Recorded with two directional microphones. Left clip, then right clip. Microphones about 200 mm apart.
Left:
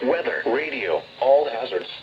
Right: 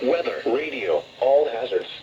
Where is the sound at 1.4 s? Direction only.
35° left (ahead or behind).